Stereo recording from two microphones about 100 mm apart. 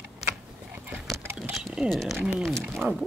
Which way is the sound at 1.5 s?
5° right (ahead or behind).